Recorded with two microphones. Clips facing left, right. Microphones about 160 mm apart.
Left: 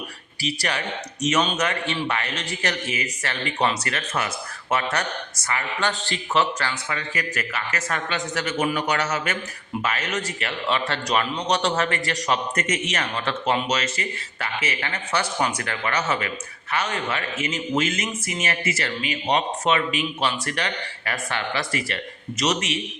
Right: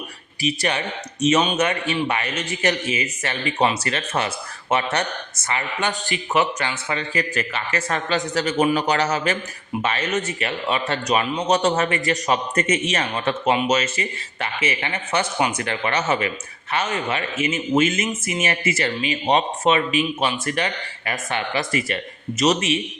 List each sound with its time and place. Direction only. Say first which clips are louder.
0.4 s a man's voice: right 4 dB; 20° right (ahead or behind)